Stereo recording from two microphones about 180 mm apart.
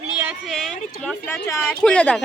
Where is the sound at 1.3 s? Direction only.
15° left (ahead or behind).